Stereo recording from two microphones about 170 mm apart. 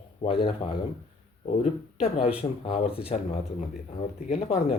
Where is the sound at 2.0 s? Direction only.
35° left (ahead or behind).